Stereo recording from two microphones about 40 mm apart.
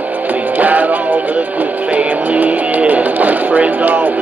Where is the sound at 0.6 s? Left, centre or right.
Right.